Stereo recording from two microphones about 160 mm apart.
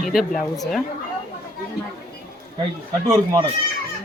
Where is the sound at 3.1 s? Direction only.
20° right (ahead or behind).